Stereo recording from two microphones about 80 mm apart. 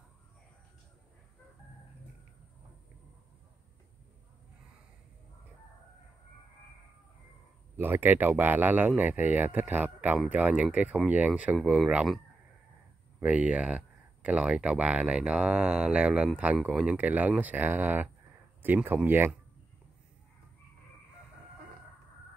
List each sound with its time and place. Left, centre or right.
7.7 s speech: right
9.9 s speech: centre
13.2 s speech: centre